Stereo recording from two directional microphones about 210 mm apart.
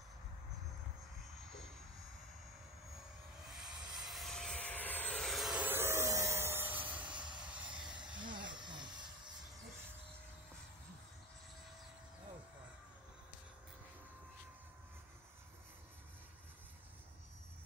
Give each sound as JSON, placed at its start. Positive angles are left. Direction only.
{"t": 3.4, "sound": "vehicle", "side_deg": 0}
{"t": 7.1, "sound": "vehicle", "side_deg": -20}
{"t": 7.8, "sound": "a sound", "side_deg": -20}